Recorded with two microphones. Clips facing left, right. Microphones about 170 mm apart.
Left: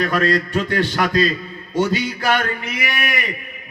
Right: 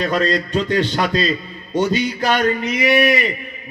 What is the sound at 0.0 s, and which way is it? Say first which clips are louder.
A man's voice: even; 20° right (ahead or behind).